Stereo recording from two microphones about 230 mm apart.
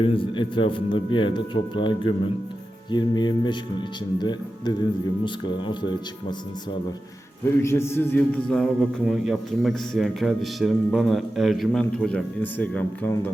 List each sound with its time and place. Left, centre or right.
0.0 s a man's voice: left
7.6 s a man's voice: centre